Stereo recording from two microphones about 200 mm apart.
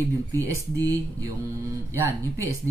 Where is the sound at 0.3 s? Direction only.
15° right (ahead or behind).